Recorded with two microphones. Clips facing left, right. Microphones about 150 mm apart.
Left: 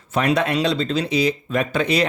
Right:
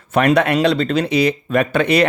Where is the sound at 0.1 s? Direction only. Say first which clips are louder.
Right 5 dB; 60° right (ahead or behind).